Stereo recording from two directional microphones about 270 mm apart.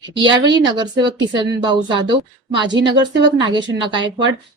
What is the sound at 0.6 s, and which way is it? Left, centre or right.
Speech, centre.